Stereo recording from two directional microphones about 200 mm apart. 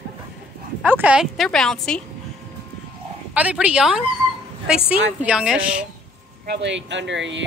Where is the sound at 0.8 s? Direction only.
10° right (ahead or behind).